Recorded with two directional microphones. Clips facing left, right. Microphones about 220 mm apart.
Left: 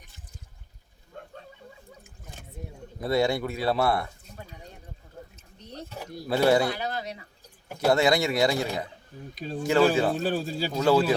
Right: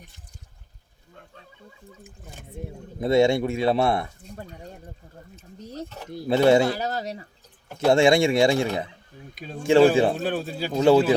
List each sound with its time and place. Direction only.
3.0 s speech: 25° right (ahead or behind)
6.2 s speech: 25° right (ahead or behind)
6.7 s speech: 40° right (ahead or behind)
7.9 s speech: 25° right (ahead or behind)
9.3 s speech: centre (ahead or behind)
9.6 s speech: 30° right (ahead or behind)
10.2 s speech: centre (ahead or behind)
10.7 s speech: 25° right (ahead or behind)